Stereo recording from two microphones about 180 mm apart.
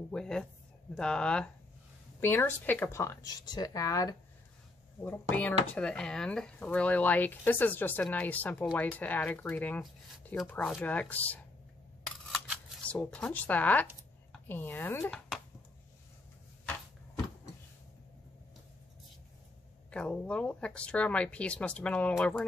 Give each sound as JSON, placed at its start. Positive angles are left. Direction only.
{"t": 0.1, "sound": "speech", "side_deg": 5}
{"t": 5.0, "sound": "speech", "side_deg": 10}
{"t": 12.3, "sound": "a sound", "side_deg": 5}
{"t": 14.5, "sound": "speech", "side_deg": 10}
{"t": 15.0, "sound": "a sound", "side_deg": 5}
{"t": 19.9, "sound": "speech", "side_deg": 5}